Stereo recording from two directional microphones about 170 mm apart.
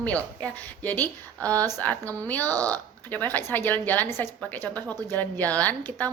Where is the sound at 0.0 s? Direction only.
10° left (ahead or behind).